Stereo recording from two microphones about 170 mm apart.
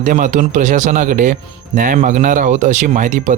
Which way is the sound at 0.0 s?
50° right (ahead or behind).